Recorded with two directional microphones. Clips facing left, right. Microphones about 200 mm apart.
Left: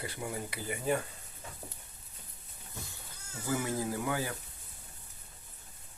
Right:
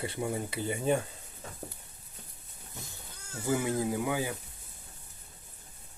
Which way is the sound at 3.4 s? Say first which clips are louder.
Right 4 dB; 20° right (ahead or behind).